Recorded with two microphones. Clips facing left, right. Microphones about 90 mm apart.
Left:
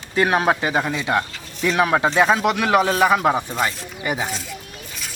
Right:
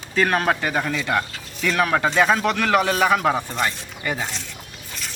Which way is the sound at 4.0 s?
15° left (ahead or behind).